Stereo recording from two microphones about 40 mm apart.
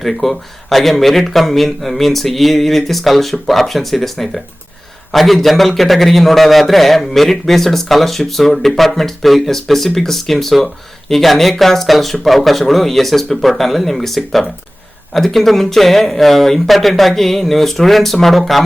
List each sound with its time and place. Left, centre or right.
0.0 s a man's voice: centre